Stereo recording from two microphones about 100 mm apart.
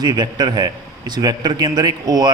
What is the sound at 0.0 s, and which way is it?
A man's voice, 45° right (ahead or behind).